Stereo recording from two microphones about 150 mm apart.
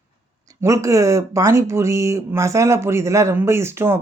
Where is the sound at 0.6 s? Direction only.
20° right (ahead or behind).